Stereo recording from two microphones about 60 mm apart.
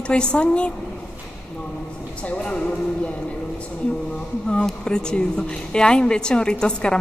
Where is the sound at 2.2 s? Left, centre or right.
Centre.